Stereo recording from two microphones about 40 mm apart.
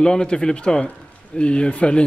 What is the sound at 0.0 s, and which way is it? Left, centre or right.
A man's voice, left.